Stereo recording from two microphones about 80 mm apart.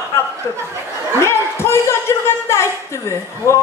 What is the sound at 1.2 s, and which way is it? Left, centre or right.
A man's voice, left.